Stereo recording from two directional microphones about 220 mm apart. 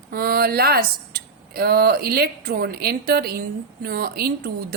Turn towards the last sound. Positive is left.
turn(degrees=-45)  # may be behind; listen again after turning